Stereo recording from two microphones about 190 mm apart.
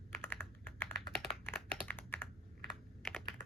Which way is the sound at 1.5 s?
10° left (ahead or behind).